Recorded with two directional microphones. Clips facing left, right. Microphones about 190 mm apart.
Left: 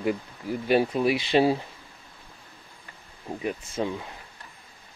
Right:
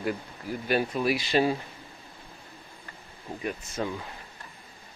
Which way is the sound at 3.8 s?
10° left (ahead or behind).